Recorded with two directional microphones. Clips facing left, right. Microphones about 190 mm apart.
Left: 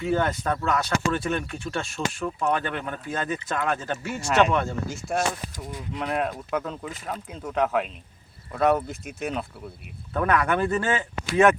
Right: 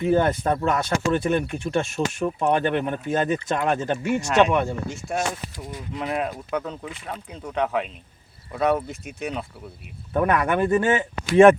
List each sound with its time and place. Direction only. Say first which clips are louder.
0.0 s speech: right 4 dB; 20° right (ahead or behind)
4.3 s speech: right 1 dB; centre (ahead or behind)
10.1 s speech: right 2 dB; 20° right (ahead or behind)